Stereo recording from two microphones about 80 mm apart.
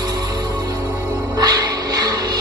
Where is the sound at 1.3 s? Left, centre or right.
Right.